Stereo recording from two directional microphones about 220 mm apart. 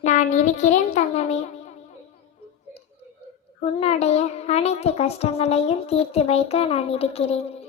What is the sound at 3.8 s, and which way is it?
Speech, 30° left (ahead or behind).